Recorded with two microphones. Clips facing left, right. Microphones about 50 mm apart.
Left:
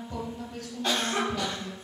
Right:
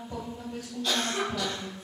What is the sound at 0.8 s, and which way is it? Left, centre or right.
Speech, left.